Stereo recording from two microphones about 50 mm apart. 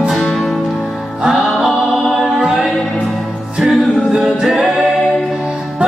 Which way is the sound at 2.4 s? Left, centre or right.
Centre.